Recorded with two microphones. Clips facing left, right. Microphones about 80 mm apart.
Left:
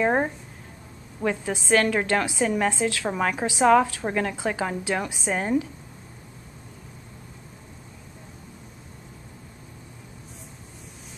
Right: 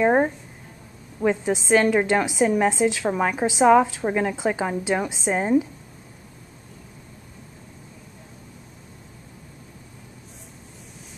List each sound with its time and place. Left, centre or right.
0.0 s speech: centre
1.2 s a woman's voice: centre